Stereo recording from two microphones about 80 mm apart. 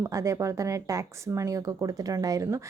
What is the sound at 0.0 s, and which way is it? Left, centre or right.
Speech, right.